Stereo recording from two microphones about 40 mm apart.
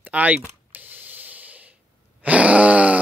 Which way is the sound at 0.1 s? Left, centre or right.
Right.